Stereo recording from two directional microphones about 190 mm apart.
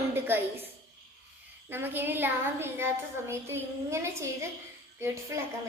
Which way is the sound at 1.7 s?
10° right (ahead or behind).